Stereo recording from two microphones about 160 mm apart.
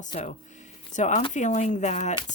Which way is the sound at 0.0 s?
50° left (ahead or behind).